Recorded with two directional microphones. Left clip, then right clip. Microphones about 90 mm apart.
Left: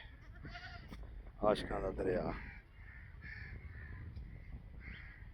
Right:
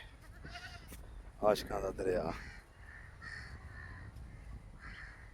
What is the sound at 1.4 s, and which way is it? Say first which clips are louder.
Speech: right 2 dB; 5° left (ahead or behind).